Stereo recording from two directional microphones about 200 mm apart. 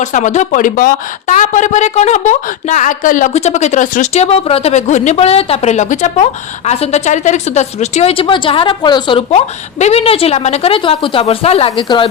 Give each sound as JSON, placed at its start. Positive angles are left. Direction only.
{"t": 0.0, "sound": "a woman's voice", "side_deg": 35}